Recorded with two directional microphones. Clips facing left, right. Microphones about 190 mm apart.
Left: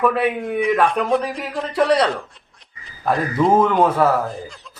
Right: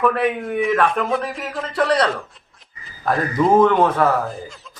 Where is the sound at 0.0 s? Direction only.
5° left (ahead or behind).